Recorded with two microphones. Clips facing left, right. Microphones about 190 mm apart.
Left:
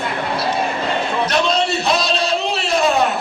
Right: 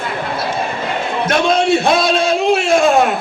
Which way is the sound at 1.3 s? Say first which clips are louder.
Right 7 dB; 50° right (ahead or behind).